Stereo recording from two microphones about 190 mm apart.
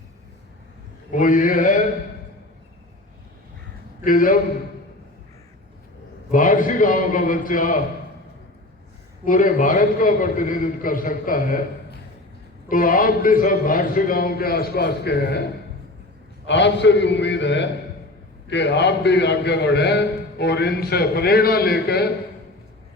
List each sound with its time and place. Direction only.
1.1 s a man's voice: 45° left (ahead or behind)
4.0 s a man's voice: 45° left (ahead or behind)
6.3 s a man's voice: 45° left (ahead or behind)
9.2 s a man's voice: 45° left (ahead or behind)
12.6 s a man's voice: 45° left (ahead or behind)
16.5 s a man's voice: 70° left (ahead or behind)